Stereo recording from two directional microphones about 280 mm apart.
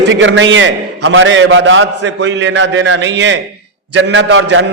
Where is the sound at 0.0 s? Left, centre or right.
Right.